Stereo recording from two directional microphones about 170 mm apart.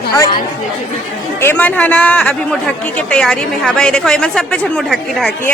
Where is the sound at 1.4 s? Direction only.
10° left (ahead or behind).